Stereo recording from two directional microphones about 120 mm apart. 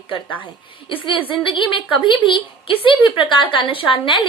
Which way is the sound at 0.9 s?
45° left (ahead or behind).